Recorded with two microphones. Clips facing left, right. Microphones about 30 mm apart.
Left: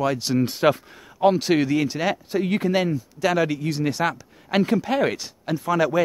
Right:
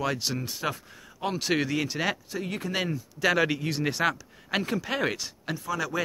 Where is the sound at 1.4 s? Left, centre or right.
Centre.